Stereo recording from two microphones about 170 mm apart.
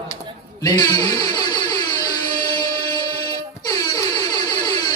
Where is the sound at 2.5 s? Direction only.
20° left (ahead or behind).